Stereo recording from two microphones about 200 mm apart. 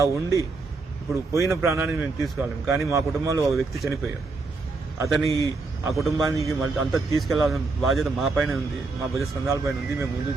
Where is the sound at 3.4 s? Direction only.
Centre (ahead or behind).